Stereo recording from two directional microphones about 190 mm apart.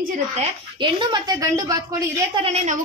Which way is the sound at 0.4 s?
25° right (ahead or behind).